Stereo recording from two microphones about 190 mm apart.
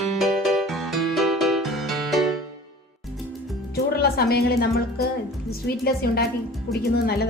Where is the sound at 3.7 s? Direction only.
55° left (ahead or behind).